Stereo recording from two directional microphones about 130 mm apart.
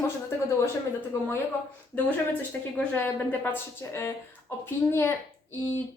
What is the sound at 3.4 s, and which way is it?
A woman's voice, 20° left (ahead or behind).